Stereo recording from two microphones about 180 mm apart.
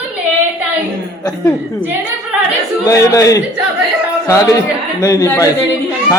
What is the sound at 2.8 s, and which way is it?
A man's voice, 20° left (ahead or behind).